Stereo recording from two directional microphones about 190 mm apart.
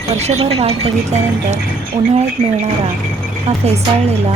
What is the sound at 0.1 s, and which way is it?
A woman's voice, 35° right (ahead or behind).